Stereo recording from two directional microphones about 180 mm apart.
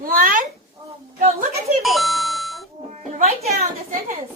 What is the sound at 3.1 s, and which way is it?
Music, 35° right (ahead or behind).